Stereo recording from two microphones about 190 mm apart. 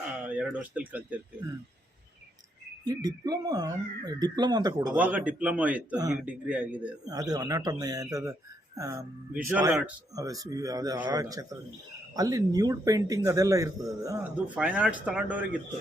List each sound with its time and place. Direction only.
0.3 s speech: 5° right (ahead or behind)
2.8 s speech: 20° right (ahead or behind)
4.9 s a man's voice: 10° right (ahead or behind)
7.1 s a man's voice: 20° right (ahead or behind)
14.4 s a man's voice: 5° right (ahead or behind)